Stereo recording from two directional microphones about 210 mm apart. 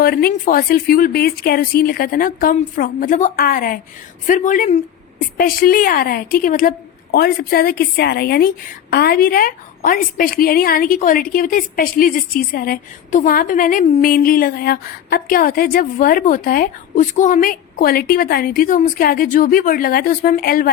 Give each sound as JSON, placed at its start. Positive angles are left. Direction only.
{"t": 0.0, "sound": "a woman's voice", "side_deg": 45}